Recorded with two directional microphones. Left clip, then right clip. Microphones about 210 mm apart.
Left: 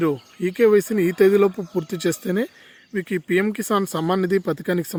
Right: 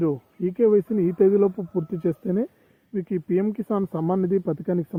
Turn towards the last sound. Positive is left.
turn(degrees=15)  # may be behind; listen again after turning